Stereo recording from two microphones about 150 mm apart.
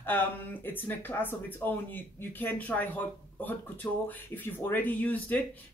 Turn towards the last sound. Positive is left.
turn(degrees=10)  # may be behind; listen again after turning